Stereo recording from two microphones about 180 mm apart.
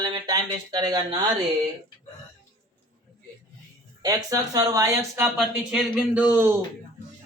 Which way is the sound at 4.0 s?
20° right (ahead or behind).